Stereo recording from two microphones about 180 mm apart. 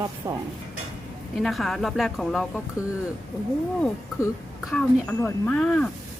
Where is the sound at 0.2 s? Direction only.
15° right (ahead or behind).